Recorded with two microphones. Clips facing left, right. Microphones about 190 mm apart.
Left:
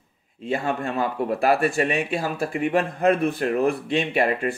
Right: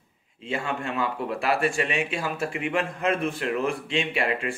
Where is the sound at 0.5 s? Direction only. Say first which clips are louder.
Left 4 dB; 40° left (ahead or behind).